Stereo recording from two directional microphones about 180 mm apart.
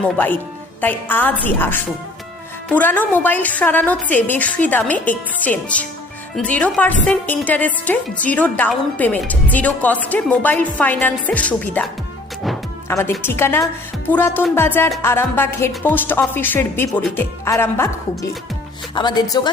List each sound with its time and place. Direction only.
0.8 s a woman's voice: 10° left (ahead or behind)
12.9 s a woman's voice: 15° left (ahead or behind)